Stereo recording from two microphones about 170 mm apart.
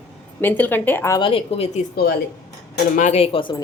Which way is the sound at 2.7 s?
50° left (ahead or behind).